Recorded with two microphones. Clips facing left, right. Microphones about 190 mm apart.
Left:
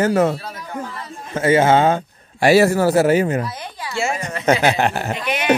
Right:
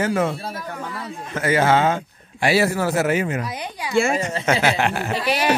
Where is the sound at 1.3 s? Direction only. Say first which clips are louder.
Left 4 dB; 25° left (ahead or behind).